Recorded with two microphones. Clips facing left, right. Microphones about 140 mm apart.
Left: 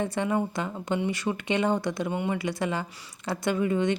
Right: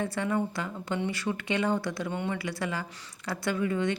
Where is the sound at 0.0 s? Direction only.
20° left (ahead or behind).